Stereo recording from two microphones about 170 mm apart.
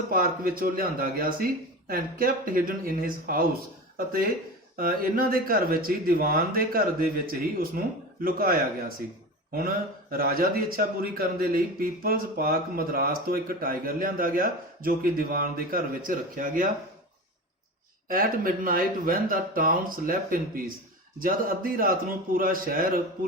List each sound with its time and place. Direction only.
0.1 s a man's voice: 55° right (ahead or behind)
18.1 s a man's voice: 55° right (ahead or behind)